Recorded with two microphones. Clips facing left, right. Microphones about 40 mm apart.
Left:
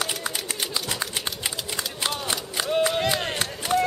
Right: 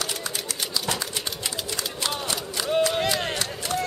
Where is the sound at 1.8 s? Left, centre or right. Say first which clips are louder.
Left 1 dB; centre.